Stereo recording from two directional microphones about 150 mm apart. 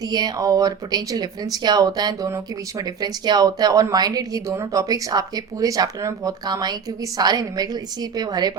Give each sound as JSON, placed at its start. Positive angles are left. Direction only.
{"t": 0.0, "sound": "speech", "side_deg": -25}